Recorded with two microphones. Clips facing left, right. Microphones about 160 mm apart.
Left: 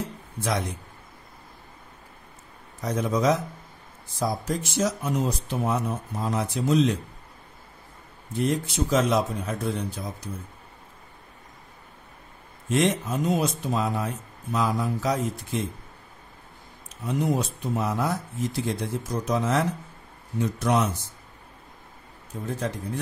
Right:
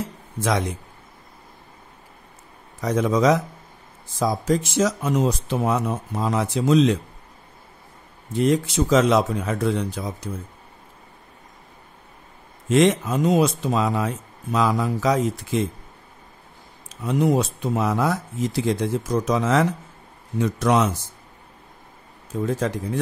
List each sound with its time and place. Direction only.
0.4 s speech: 90° right
2.8 s speech: 90° right
8.3 s speech: 90° right
12.6 s speech: 90° right
16.9 s speech: 90° right
22.3 s speech: 90° right